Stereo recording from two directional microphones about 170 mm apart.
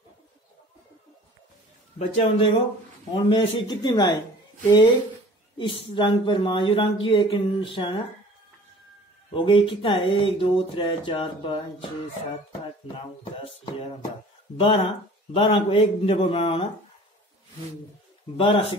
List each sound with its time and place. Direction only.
2.0 s a man's voice: 40° left (ahead or behind)
5.6 s speech: 30° left (ahead or behind)
9.3 s speech: 30° left (ahead or behind)
12.8 s speech: 30° left (ahead or behind)
14.6 s speech: 35° left (ahead or behind)
18.4 s speech: 35° left (ahead or behind)